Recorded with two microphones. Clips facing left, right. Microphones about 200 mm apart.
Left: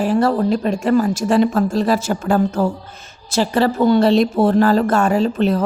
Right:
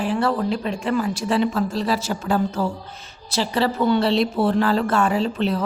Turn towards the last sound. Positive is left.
turn(degrees=45)  # may be behind; listen again after turning